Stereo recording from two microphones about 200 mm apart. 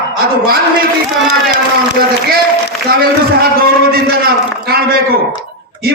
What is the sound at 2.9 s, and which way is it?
Speech, 50° right (ahead or behind).